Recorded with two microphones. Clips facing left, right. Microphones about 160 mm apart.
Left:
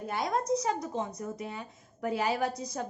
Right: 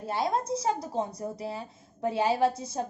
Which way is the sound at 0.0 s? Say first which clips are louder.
Right 2 dB; 30° right (ahead or behind).